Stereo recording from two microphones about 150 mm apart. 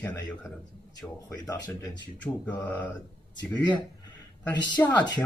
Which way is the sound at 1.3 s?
20° left (ahead or behind).